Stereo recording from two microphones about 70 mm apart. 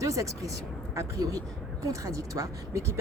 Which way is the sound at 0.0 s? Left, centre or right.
Right.